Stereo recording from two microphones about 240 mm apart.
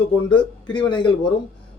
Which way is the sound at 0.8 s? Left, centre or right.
Centre.